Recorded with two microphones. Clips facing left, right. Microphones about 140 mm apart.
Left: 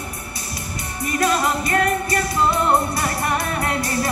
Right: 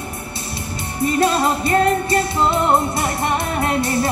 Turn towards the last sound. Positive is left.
turn(degrees=-25)  # may be behind; listen again after turning